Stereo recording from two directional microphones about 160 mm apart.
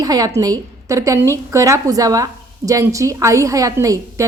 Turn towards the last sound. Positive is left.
turn(degrees=-20)  # may be behind; listen again after turning